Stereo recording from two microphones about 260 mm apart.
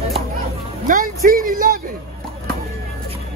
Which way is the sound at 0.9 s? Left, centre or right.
Right.